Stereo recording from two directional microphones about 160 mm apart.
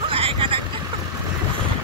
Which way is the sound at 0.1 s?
35° right (ahead or behind).